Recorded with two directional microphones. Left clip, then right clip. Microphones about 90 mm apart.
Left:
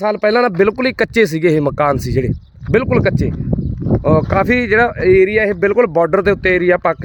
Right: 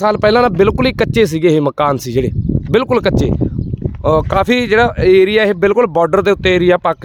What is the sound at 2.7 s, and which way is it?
Speech, 40° right (ahead or behind).